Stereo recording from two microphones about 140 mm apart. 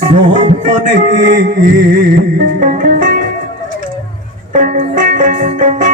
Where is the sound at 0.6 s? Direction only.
70° right (ahead or behind).